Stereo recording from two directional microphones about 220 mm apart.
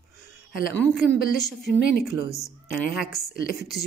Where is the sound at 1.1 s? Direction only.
40° left (ahead or behind).